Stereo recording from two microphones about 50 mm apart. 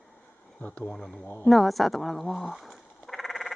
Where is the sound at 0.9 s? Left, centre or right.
Centre.